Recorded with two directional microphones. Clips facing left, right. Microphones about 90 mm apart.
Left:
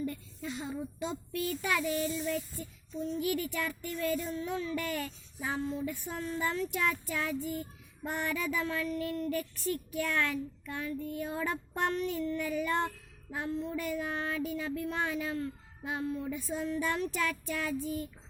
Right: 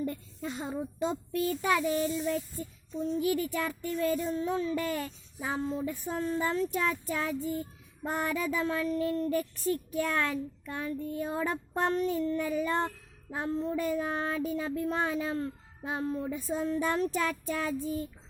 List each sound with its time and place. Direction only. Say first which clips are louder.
0.0 s a child's voice: right 2 dB; 35° right (ahead or behind)
2.9 s child singing: right 3 dB; 30° right (ahead or behind)